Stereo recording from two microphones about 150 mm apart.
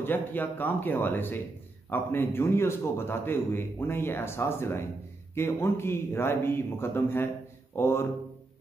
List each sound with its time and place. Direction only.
0.0 s a man's voice: 15° left (ahead or behind)